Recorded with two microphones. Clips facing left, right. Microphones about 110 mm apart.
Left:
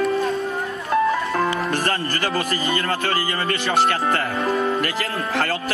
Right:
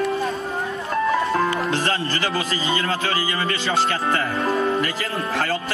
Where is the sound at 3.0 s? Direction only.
45° left (ahead or behind).